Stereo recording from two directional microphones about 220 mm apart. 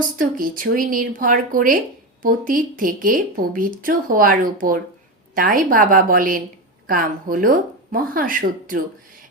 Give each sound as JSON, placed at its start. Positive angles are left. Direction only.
{"t": 0.2, "sound": "speech", "side_deg": -40}